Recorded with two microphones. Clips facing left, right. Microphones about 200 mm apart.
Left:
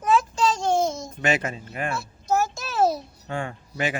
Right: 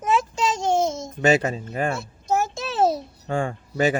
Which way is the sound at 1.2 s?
35° right (ahead or behind).